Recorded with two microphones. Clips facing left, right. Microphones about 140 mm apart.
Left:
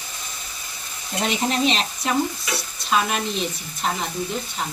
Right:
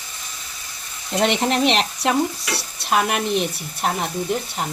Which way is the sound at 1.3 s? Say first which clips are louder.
Right 2 dB; 65° right (ahead or behind).